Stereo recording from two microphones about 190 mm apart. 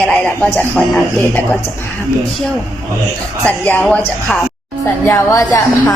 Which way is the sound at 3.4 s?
10° left (ahead or behind).